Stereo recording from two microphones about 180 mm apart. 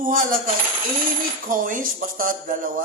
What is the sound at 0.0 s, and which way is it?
A man's voice, 50° right (ahead or behind).